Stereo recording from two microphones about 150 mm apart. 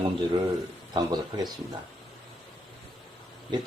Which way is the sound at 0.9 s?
30° right (ahead or behind).